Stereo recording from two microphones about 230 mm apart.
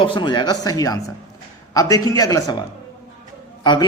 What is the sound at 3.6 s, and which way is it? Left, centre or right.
Speech, centre.